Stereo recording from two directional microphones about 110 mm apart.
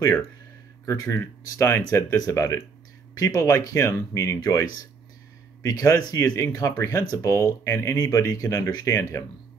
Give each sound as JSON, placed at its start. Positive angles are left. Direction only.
{"t": 0.8, "sound": "speech", "side_deg": 25}